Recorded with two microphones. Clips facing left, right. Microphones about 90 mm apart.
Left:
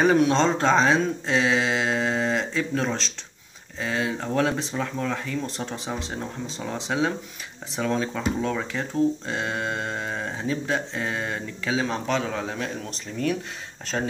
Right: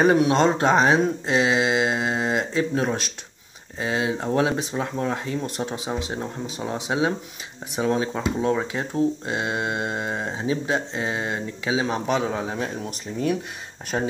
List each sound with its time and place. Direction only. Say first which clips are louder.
0.2 s speech: right 1 dB; 10° right (ahead or behind)
5.6 s speech: right 3 dB; 15° right (ahead or behind)
13.9 s speech: right 2 dB; 25° right (ahead or behind)